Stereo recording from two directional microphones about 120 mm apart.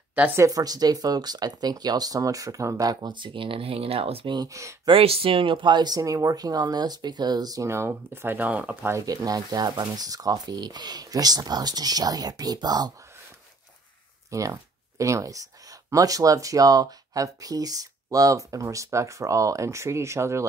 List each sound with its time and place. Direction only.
0.4 s speech: 30° right (ahead or behind); by 4.4 s 50° right (ahead or behind)
4.4 s speech: 25° right (ahead or behind)
4.8 s speech: 50° right (ahead or behind); by 12.9 s 35° right (ahead or behind)
14.3 s speech: 25° right (ahead or behind)